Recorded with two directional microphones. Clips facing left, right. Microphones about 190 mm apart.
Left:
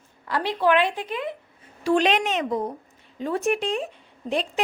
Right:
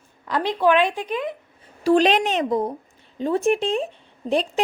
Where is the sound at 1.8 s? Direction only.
35° right (ahead or behind).